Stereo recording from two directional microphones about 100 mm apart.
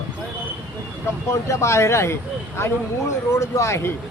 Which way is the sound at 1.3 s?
30° left (ahead or behind).